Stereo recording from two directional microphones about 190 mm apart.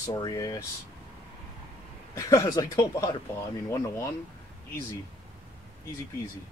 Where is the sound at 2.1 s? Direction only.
15° left (ahead or behind).